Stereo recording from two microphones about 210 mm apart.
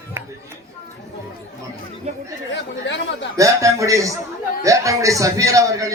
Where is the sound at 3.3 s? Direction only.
15° right (ahead or behind).